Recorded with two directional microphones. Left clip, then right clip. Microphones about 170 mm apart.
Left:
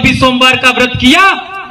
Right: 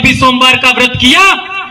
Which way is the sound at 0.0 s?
5° right (ahead or behind).